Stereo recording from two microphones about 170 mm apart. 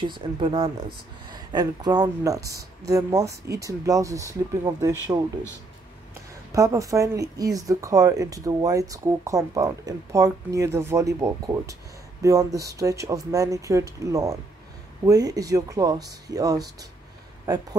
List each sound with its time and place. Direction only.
0.0 s speech: 30° right (ahead or behind)
6.5 s speech: 20° right (ahead or behind)